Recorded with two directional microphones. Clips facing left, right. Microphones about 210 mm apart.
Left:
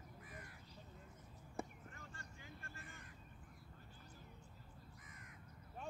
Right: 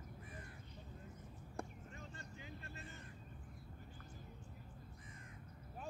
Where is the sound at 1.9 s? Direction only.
20° right (ahead or behind).